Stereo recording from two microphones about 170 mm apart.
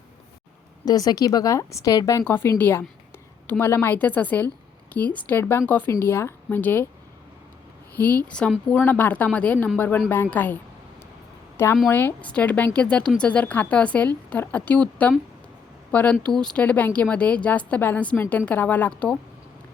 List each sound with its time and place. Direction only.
0.9 s a woman's voice: 20° left (ahead or behind)
7.9 s a woman's voice: 10° left (ahead or behind)